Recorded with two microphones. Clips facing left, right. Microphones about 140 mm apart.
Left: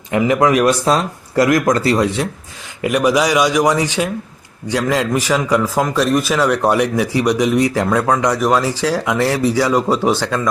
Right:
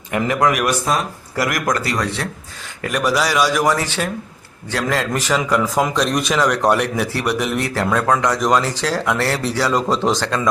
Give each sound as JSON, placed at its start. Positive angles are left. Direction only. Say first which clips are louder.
{"t": 0.2, "sound": "speech", "louder": "left 4 dB", "side_deg": 20}
{"t": 2.8, "sound": "speech", "louder": "left 5 dB", "side_deg": 15}